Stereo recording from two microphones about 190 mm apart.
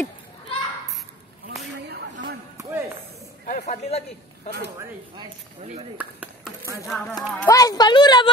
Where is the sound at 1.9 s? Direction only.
65° right (ahead or behind).